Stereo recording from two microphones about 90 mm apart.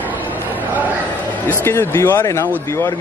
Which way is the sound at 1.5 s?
30° left (ahead or behind).